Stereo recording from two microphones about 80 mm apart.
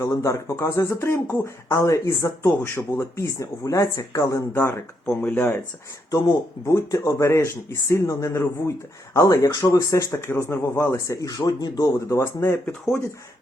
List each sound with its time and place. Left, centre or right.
0.0 s speech: left
3.3 s speech: left
5.0 s speech: centre
6.7 s speech: left
11.9 s speech: left